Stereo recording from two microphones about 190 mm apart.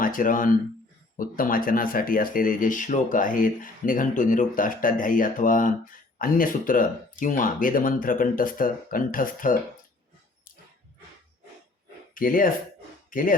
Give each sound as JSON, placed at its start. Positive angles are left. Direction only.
{"t": 0.0, "sound": "speech", "side_deg": 45}
{"t": 12.1, "sound": "speech", "side_deg": 45}
{"t": 13.1, "sound": "a sound", "side_deg": 45}